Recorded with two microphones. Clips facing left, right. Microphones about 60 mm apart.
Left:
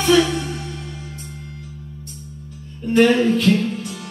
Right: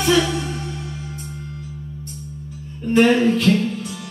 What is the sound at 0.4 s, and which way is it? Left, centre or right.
Music, right.